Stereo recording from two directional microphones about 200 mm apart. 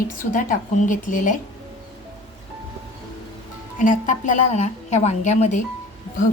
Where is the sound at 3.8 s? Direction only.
40° left (ahead or behind).